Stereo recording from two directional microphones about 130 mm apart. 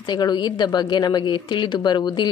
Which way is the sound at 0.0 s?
35° left (ahead or behind).